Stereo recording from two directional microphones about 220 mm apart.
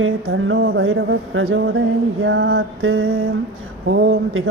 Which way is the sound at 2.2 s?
65° right (ahead or behind).